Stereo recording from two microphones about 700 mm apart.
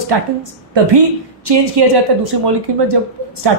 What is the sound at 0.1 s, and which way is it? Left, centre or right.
A woman's voice, right.